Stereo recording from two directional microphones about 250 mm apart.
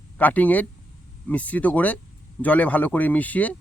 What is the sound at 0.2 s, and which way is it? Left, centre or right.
A man's voice, centre.